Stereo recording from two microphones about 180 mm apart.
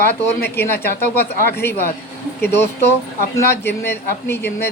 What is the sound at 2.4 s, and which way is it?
Speech, 70° left (ahead or behind).